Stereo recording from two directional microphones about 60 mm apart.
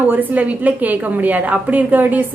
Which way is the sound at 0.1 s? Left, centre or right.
Right.